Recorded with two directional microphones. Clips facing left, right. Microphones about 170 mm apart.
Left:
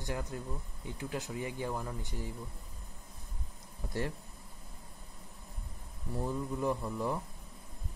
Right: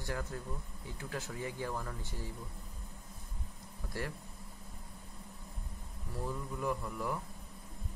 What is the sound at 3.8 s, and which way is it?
Speech, 25° left (ahead or behind).